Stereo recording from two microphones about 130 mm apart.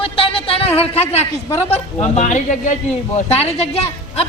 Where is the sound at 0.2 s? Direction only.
45° left (ahead or behind).